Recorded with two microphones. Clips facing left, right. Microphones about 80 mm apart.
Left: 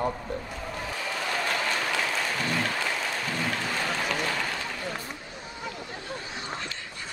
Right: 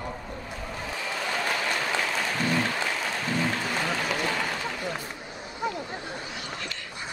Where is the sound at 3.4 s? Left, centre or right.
Centre.